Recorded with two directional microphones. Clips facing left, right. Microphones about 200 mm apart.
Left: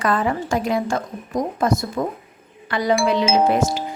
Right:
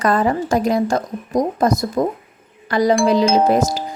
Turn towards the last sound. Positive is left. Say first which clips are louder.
# right 2 dB
turn(degrees=-40)  # may be behind; listen again after turning